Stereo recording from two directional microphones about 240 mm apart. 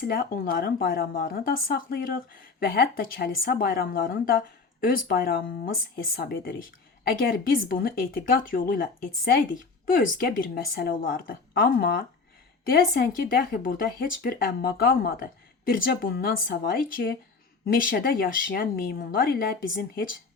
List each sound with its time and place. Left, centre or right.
0.1 s speech: left